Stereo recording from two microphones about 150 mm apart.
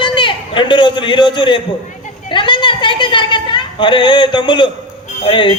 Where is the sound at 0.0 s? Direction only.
35° left (ahead or behind).